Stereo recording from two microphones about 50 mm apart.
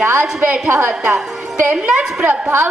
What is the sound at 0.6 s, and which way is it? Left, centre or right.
Speech, right.